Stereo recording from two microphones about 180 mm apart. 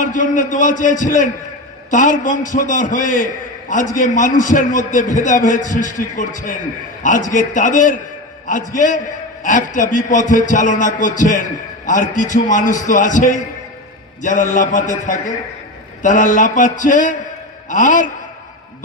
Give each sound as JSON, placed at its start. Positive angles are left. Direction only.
{"t": 0.0, "sound": "a man's voice", "side_deg": 45}